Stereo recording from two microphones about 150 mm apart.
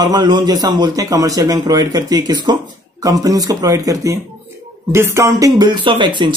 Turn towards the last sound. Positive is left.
turn(degrees=-30)  # may be behind; listen again after turning